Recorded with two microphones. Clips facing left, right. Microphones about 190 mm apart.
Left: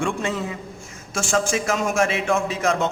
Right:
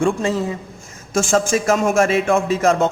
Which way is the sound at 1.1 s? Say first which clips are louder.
Right 5 dB; 45° right (ahead or behind).